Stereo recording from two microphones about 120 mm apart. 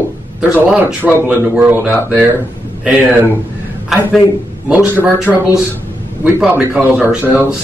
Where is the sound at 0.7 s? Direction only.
10° right (ahead or behind).